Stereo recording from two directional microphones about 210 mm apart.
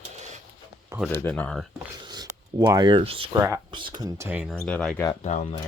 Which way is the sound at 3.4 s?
20° right (ahead or behind).